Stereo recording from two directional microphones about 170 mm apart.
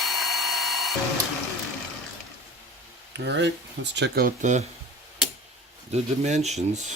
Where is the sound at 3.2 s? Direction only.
90° right.